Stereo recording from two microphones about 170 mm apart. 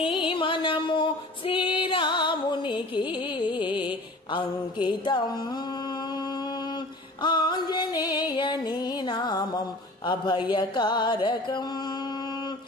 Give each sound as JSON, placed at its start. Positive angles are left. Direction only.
{"t": 0.0, "sound": "music", "side_deg": 30}
{"t": 7.2, "sound": "music", "side_deg": 25}